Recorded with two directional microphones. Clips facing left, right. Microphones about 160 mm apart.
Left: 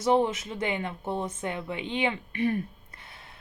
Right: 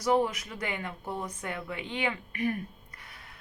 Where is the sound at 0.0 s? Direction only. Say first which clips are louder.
Left 3 dB; 25° left (ahead or behind).